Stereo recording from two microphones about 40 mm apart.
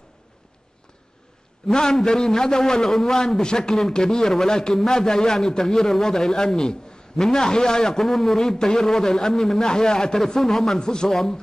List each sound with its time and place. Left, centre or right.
1.7 s a man's voice: centre
10.8 s a man's voice: centre